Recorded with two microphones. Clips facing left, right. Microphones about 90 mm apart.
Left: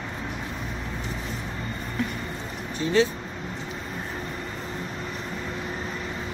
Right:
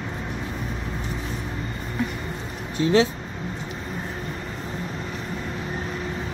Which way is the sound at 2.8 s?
80° right.